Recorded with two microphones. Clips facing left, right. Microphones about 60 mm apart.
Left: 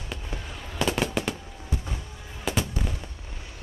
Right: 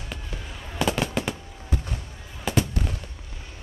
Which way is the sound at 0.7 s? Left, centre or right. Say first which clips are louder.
Right 1 dB; centre.